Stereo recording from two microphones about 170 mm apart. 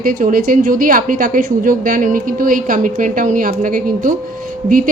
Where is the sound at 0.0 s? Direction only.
55° right (ahead or behind).